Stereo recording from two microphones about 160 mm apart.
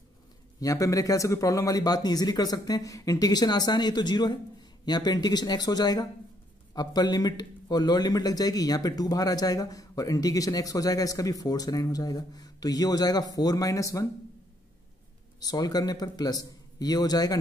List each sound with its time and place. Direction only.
0.6 s speech: 20° left (ahead or behind)
15.4 s speech: 25° left (ahead or behind)